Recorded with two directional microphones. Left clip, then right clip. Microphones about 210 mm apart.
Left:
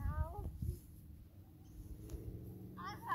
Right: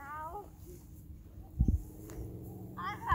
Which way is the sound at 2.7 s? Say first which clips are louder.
Right 9 dB; 15° left (ahead or behind).